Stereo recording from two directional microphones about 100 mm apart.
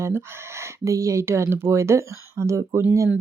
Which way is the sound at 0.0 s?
25° right (ahead or behind).